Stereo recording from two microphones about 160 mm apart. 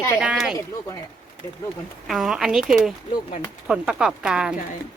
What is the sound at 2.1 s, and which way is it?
Speech, centre (ahead or behind).